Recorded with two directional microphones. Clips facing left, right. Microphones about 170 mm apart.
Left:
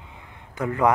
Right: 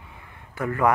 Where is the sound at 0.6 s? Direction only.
20° left (ahead or behind).